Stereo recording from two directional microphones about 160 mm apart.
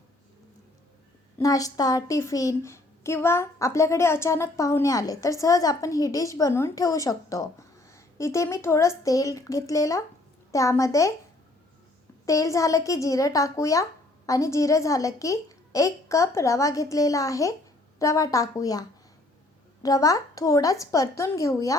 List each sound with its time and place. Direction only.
1.4 s a woman's voice: 20° left (ahead or behind)
12.2 s a woman's voice: 20° left (ahead or behind)